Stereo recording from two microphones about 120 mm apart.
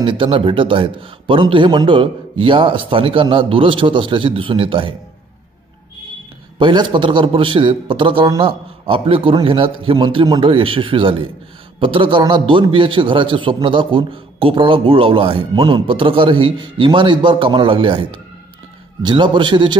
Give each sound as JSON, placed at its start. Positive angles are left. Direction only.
{"t": 0.0, "sound": "a man's voice", "side_deg": -45}
{"t": 6.6, "sound": "a man's voice", "side_deg": -40}
{"t": 19.0, "sound": "a man's voice", "side_deg": -40}